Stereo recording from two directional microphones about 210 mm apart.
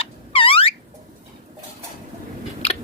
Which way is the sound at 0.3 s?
25° left (ahead or behind).